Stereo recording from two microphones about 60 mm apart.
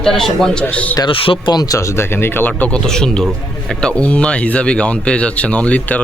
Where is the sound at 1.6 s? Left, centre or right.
Left.